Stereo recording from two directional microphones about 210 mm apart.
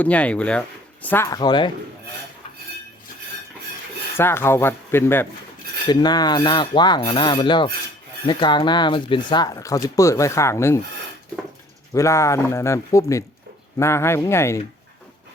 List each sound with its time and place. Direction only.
0.0 s speech: 5° left (ahead or behind)
4.2 s speech: 10° left (ahead or behind)
5.9 s rub: 20° left (ahead or behind)
8.3 s speech: 20° left (ahead or behind)
11.9 s speech: 15° left (ahead or behind)